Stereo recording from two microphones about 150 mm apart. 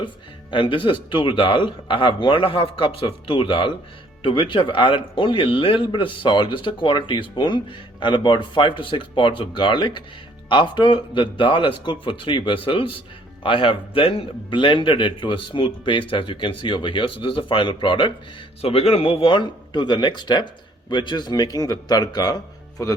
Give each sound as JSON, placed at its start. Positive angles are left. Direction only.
{"t": 0.5, "sound": "a man's voice", "side_deg": 35}